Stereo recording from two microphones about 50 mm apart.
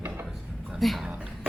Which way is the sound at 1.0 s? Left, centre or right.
Right.